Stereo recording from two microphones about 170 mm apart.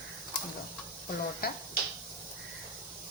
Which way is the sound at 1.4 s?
60° left (ahead or behind).